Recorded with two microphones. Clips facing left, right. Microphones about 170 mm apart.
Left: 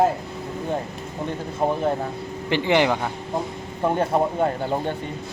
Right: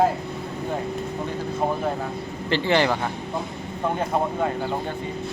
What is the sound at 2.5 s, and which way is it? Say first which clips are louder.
Speech: left 1 dB; 15° left (ahead or behind).